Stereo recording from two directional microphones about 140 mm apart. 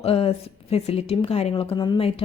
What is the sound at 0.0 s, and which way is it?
A woman's voice, 45° left (ahead or behind).